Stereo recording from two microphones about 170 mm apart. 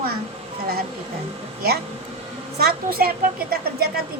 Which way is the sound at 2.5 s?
60° right (ahead or behind).